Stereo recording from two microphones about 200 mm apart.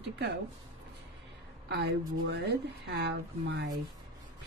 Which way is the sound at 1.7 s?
60° right (ahead or behind).